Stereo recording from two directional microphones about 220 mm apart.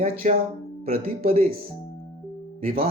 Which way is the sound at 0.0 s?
40° right (ahead or behind).